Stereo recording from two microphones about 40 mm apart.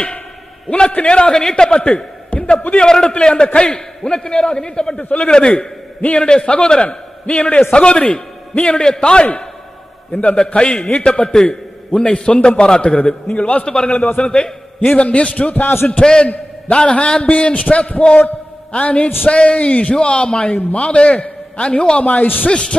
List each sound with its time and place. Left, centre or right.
0.7 s a man's voice: left
2.3 s a sound: left
2.8 s a man's voice: left
13.9 s a man's voice: left
14.2 s a man's voice: left
14.8 s a man's voice: left
16.0 s a man's voice: centre
22.0 s a man's voice: left
22.5 s a man's voice: left